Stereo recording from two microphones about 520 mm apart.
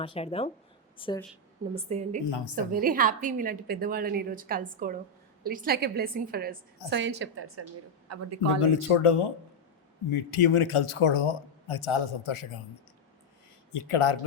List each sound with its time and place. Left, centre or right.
0.0 s speech: centre
1.7 s a woman's voice: centre
2.2 s a woman's voice: left
2.7 s a woman's voice: centre
8.6 s a man's voice: left
13.7 s a man's voice: left